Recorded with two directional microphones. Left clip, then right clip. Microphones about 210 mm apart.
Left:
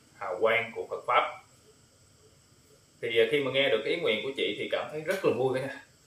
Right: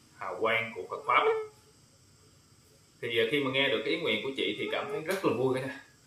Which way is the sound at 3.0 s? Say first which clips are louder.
Left 3 dB; 5° left (ahead or behind).